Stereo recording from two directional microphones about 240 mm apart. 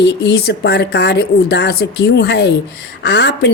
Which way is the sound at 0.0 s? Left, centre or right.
Left.